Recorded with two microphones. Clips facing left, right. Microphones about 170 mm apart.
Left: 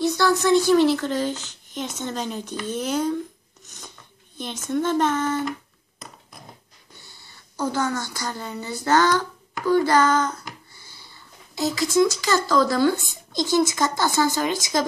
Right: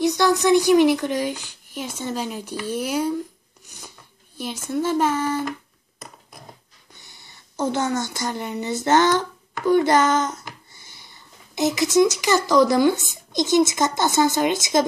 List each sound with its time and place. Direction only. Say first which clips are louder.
0.0 s a woman's voice: right 2 dB; 15° right (ahead or behind)
3.6 s filing: even; 10° right (ahead or behind)
4.4 s a woman's voice: even; 10° right (ahead or behind)
7.0 s a woman's voice: even; 20° right (ahead or behind)
10.7 s a sound: even; 20° right (ahead or behind)
13.3 s speech: right 3 dB; 20° right (ahead or behind)